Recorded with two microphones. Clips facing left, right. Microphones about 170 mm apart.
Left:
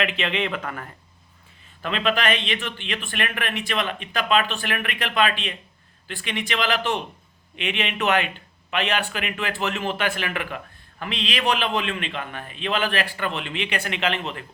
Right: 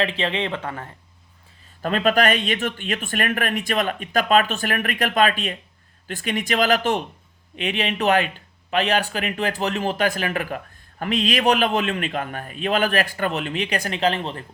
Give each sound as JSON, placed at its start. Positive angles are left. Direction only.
{"t": 0.0, "sound": "speech", "side_deg": -30}
{"t": 1.8, "sound": "speech", "side_deg": -45}